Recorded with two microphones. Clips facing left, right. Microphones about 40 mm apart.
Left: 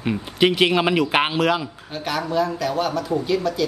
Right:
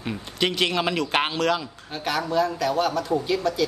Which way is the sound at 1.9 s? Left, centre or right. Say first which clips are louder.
Left 1 dB; centre.